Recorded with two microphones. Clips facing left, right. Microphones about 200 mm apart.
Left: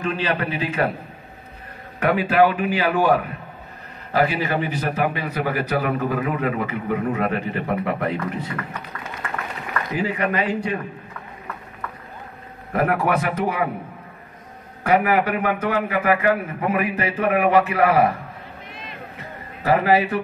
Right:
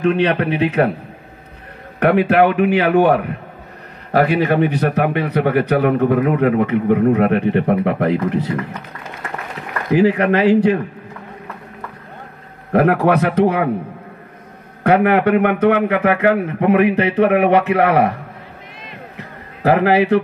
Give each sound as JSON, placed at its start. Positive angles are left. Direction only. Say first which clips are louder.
{"t": 0.0, "sound": "speech", "louder": "right 8 dB", "side_deg": -65}
{"t": 2.0, "sound": "speech", "louder": "right 4 dB", "side_deg": -65}
{"t": 9.9, "sound": "a man's voice", "louder": "right 10 dB", "side_deg": -75}
{"t": 12.7, "sound": "a man's voice", "louder": "right 7 dB", "side_deg": -70}
{"t": 14.8, "sound": "a man's voice", "louder": "right 5 dB", "side_deg": -65}
{"t": 19.1, "sound": "music", "louder": "right 1 dB", "side_deg": -70}